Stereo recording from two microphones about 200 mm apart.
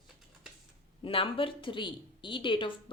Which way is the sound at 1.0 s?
25° left (ahead or behind).